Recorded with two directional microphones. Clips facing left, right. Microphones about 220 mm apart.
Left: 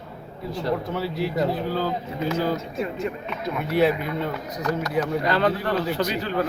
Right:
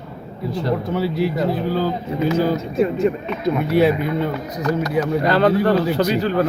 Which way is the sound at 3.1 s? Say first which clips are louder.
Right 10 dB; 30° right (ahead or behind).